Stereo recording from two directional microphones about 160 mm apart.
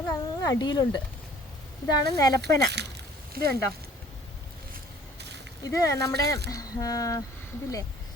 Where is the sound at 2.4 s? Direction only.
90° right.